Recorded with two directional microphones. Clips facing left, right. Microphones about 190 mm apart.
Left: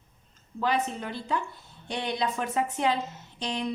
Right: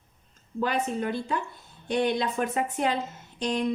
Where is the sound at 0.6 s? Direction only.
50° right (ahead or behind).